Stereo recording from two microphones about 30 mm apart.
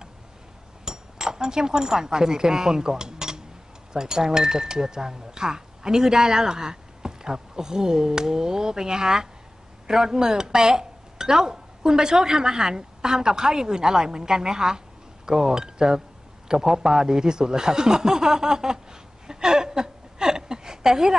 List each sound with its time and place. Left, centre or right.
0.8 s speech: right